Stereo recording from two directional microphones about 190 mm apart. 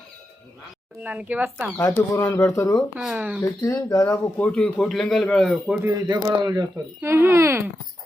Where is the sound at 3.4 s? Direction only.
20° left (ahead or behind); by 5.9 s 5° right (ahead or behind).